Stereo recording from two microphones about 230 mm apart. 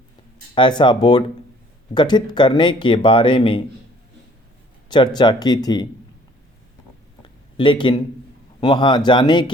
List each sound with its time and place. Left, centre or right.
0.5 s speech: centre
5.1 s speech: centre
7.5 s speech: left